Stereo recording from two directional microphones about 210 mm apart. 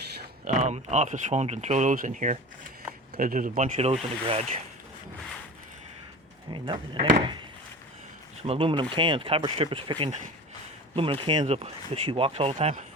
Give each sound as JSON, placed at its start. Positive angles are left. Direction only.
{"t": 0.2, "sound": "speech", "side_deg": -40}
{"t": 6.5, "sound": "speech", "side_deg": -25}
{"t": 8.4, "sound": "speech", "side_deg": -25}